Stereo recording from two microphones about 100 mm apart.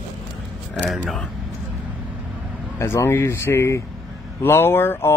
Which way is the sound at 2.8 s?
25° left (ahead or behind).